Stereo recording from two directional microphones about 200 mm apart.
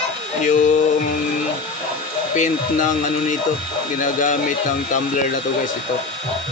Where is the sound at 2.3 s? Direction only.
40° left (ahead or behind).